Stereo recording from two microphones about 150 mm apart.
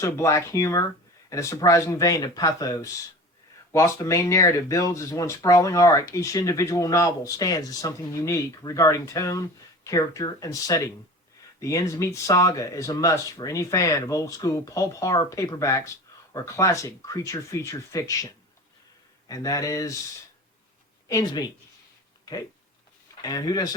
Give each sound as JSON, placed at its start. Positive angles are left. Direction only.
{"t": 0.0, "sound": "speech", "side_deg": 20}
{"t": 19.3, "sound": "speech", "side_deg": 25}
{"t": 21.1, "sound": "speech", "side_deg": 25}
{"t": 23.2, "sound": "speech", "side_deg": 25}